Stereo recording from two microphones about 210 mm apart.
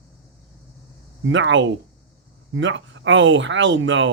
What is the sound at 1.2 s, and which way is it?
Speech, 60° right (ahead or behind).